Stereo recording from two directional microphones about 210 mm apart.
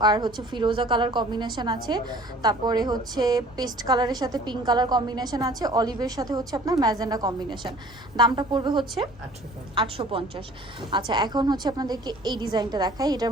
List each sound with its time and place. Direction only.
0.0 s a woman's voice: 20° right (ahead or behind)